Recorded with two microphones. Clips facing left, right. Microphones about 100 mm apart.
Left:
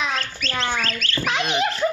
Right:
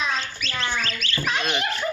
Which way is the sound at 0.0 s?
70° left (ahead or behind).